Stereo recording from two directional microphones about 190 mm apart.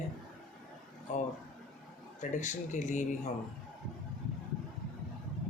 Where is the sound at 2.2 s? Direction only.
40° left (ahead or behind).